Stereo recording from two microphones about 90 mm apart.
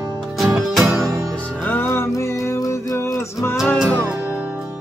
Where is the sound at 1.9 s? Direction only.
30° left (ahead or behind).